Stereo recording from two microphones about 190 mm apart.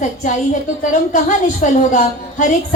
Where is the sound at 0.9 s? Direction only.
45° left (ahead or behind).